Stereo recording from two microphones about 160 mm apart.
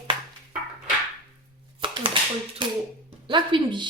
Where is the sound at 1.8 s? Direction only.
30° right (ahead or behind).